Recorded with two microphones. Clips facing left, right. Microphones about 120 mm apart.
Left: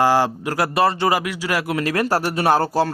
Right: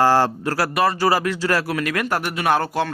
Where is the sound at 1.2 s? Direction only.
10° left (ahead or behind); by 2.9 s 35° left (ahead or behind).